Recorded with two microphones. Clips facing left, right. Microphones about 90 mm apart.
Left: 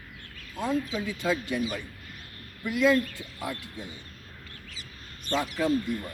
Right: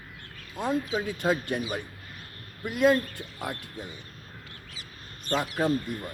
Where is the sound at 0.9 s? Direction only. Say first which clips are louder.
Right 2 dB; 50° right (ahead or behind).